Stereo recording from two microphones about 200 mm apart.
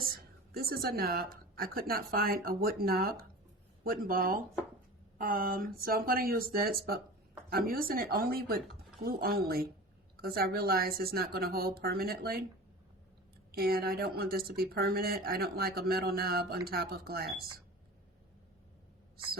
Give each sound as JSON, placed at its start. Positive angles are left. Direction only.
{"t": 0.0, "sound": "a woman's voice", "side_deg": -50}
{"t": 13.5, "sound": "speech", "side_deg": -50}